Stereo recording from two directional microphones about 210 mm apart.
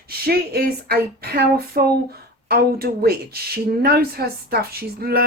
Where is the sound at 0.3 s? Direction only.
45° right (ahead or behind).